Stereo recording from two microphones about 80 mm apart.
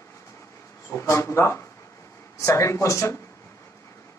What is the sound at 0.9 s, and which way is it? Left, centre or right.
Speech, left.